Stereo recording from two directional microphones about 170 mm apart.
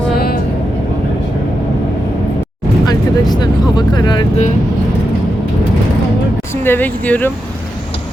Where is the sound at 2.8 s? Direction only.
25° left (ahead or behind).